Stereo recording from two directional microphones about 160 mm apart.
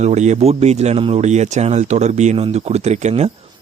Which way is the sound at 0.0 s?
45° right (ahead or behind).